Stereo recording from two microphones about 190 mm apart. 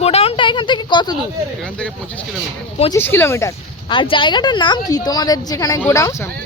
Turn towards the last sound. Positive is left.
turn(degrees=15)  # may be behind; listen again after turning